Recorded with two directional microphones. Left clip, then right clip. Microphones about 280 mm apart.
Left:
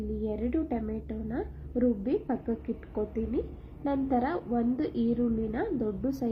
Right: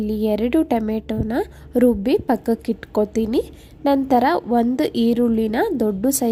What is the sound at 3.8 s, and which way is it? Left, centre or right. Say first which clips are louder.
A woman's voice: right 13 dB; right.